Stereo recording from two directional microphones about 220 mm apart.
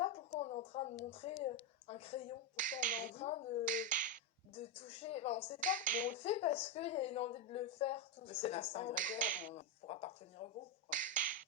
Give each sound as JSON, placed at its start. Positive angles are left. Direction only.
{"t": 0.0, "sound": "a sound", "side_deg": 25}
{"t": 1.1, "sound": "a woman's voice", "side_deg": 25}
{"t": 2.6, "sound": "speech", "side_deg": -35}
{"t": 3.2, "sound": "a woman's voice", "side_deg": 30}
{"t": 3.7, "sound": "finger snapping", "side_deg": -35}
{"t": 4.5, "sound": "a woman's voice", "side_deg": 25}
{"t": 5.5, "sound": "speech", "side_deg": -35}
{"t": 6.1, "sound": "a woman's voice", "side_deg": 30}
{"t": 9.0, "sound": "speech", "side_deg": -35}
{"t": 9.5, "sound": "a woman's voice", "side_deg": 30}
{"t": 10.8, "sound": "finger snapping", "side_deg": -35}